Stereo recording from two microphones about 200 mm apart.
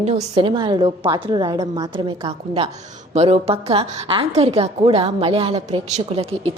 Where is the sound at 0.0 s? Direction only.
30° right (ahead or behind).